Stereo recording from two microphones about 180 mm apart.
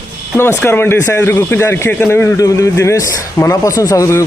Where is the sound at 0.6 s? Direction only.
10° left (ahead or behind).